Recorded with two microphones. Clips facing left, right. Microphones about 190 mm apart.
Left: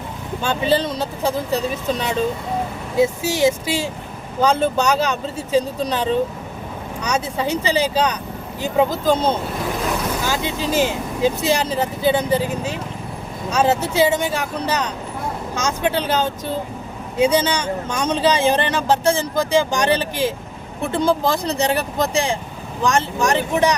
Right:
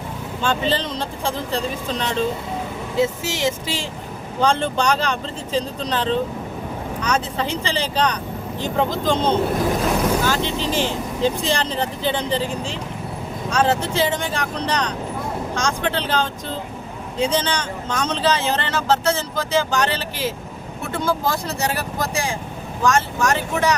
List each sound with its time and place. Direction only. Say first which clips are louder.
0.4 s speech: left 3 dB; 10° left (ahead or behind)